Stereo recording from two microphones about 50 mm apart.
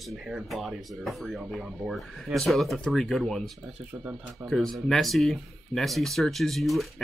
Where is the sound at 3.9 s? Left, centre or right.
Right.